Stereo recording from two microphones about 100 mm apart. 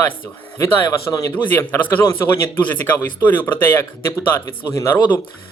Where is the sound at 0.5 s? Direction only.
25° left (ahead or behind).